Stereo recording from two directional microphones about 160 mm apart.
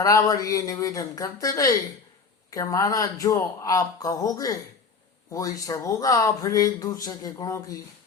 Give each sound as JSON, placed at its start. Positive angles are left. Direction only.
{"t": 0.0, "sound": "speech", "side_deg": 20}